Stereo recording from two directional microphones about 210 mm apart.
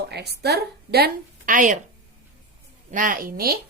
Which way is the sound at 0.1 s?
50° right (ahead or behind).